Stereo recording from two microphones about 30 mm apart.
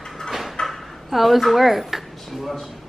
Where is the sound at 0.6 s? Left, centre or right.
Left.